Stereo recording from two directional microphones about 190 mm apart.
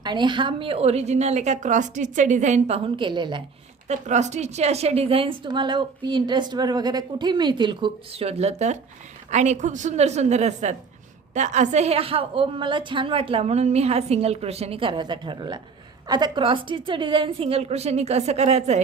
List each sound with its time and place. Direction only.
0.0 s a woman's voice: 25° right (ahead or behind)
3.8 s a woman's voice: 40° right (ahead or behind)